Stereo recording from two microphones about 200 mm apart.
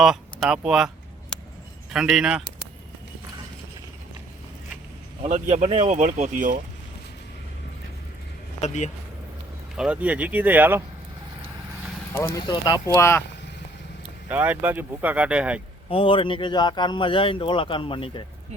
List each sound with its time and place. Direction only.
0.0 s speech: centre (ahead or behind)
1.9 s speech: 5° right (ahead or behind)
5.2 s speech: 35° right (ahead or behind)
8.6 s speech: 35° left (ahead or behind)
9.7 s speech: 5° right (ahead or behind)
12.3 s speech: 20° left (ahead or behind)
14.3 s speech: 10° right (ahead or behind)
15.9 s speech: 25° left (ahead or behind)